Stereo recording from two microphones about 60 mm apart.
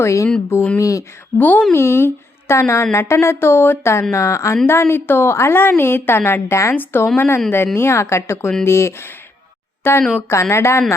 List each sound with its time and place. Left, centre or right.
0.0 s speech: left
1.4 s a woman's voice: left
1.7 s speech: left
4.1 s speech: left
4.6 s a woman's voice: left
6.7 s a woman's voice: left